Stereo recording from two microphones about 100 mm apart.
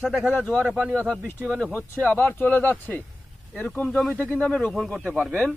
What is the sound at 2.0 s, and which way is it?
Speech, 15° left (ahead or behind).